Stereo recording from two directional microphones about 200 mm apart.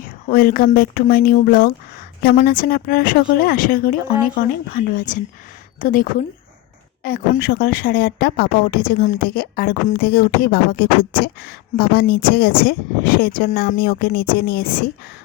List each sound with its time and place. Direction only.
0.3 s speech: 45° left (ahead or behind)